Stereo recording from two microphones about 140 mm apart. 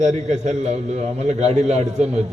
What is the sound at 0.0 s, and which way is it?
A man's voice, 55° right (ahead or behind).